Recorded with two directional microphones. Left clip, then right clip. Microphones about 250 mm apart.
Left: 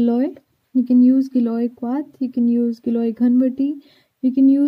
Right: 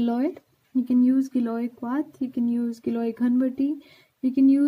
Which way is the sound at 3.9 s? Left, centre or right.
Left.